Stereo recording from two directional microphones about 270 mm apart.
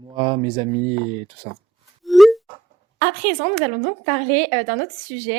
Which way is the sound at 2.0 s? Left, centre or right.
Centre.